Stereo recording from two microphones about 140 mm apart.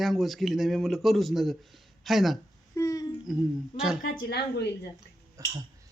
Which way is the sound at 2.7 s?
20° left (ahead or behind).